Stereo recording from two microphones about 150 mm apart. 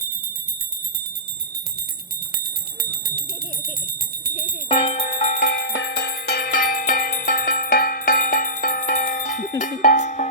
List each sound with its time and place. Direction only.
2.9 s a sound: 90° right
4.7 s bell: 40° left (ahead or behind); by 9.5 s 65° left (ahead or behind)
9.6 s cowbell: 60° left (ahead or behind)